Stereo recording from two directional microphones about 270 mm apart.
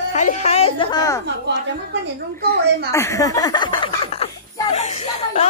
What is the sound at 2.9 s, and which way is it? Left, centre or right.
Speech, centre.